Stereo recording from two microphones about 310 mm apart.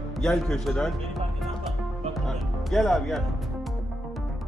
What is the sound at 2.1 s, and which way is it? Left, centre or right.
Music, centre.